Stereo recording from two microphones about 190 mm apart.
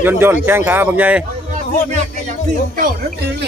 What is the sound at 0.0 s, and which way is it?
A man's voice, 10° right (ahead or behind).